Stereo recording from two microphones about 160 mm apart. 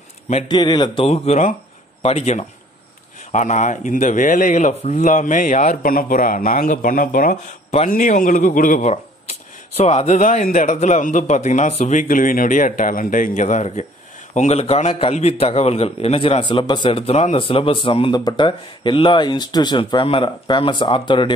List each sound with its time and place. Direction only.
0.5 s a man's voice: 25° left (ahead or behind)
1.0 s a man's voice: 40° left (ahead or behind)